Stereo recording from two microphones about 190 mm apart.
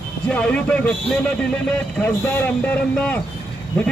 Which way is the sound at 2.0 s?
10° left (ahead or behind).